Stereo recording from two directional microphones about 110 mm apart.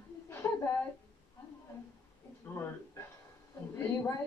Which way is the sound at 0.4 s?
30° left (ahead or behind).